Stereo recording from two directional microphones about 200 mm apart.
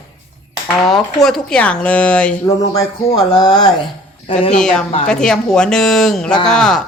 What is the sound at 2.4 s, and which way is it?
Speech, 15° left (ahead or behind).